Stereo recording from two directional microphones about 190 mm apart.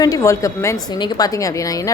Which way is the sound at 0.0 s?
15° left (ahead or behind).